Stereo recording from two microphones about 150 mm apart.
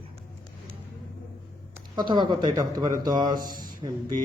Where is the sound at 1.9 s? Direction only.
30° right (ahead or behind).